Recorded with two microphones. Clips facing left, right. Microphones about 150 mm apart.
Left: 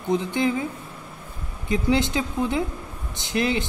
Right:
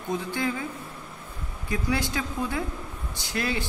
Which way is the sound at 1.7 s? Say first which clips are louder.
Left 6 dB; 20° left (ahead or behind).